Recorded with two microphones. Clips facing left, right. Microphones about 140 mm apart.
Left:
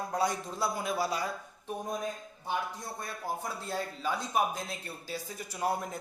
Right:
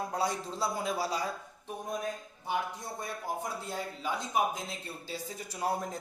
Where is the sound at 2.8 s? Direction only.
20° right (ahead or behind).